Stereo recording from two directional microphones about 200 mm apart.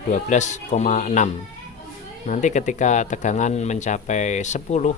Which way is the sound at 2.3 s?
35° left (ahead or behind).